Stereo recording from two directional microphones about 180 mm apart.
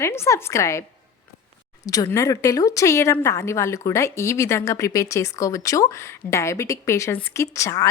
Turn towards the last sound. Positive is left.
turn(degrees=15)  # may be behind; listen again after turning